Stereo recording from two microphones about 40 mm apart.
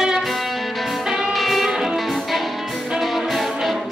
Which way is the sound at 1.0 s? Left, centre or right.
Centre.